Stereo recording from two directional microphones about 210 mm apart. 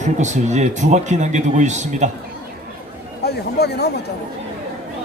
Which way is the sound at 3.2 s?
50° left (ahead or behind).